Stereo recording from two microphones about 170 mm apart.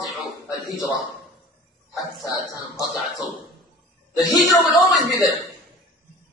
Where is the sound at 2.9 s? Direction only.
Centre (ahead or behind).